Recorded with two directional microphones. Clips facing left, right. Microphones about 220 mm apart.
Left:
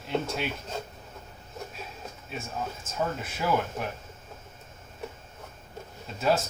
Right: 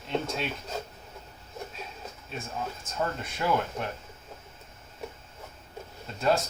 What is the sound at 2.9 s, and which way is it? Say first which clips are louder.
Speech: left 1 dB; 5° left (ahead or behind).